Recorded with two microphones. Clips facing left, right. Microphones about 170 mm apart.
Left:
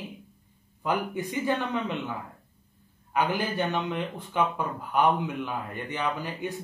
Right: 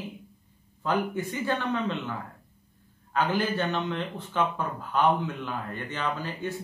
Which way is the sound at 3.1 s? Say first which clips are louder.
Right 1 dB; 15° left (ahead or behind).